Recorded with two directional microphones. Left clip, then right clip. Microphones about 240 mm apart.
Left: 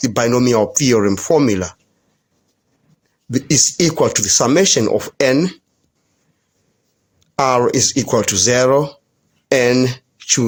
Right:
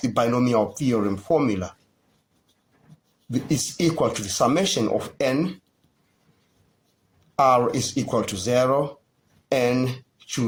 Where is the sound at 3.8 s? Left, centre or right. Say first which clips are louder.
Left 7 dB; left.